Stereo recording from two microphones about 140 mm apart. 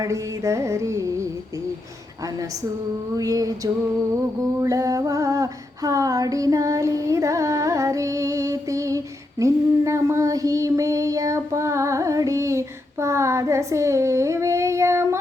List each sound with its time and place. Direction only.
0.0 s carnatic music: 20° right (ahead or behind)
3.2 s carnatic music: 25° right (ahead or behind)
4.6 s female singing: 25° right (ahead or behind)